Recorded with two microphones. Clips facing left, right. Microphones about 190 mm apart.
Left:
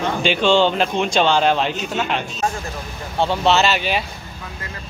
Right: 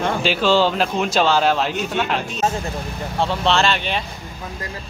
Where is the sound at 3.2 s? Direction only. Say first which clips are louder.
Left 2 dB; centre (ahead or behind).